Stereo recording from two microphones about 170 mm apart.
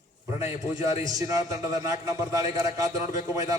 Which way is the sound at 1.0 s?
20° right (ahead or behind).